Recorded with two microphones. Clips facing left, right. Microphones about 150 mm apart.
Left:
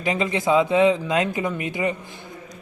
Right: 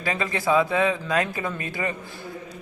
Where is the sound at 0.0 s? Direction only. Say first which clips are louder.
Left 3 dB; 20° left (ahead or behind).